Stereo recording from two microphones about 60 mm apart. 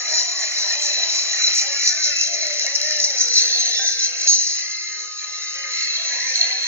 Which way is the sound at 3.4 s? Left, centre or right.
Left.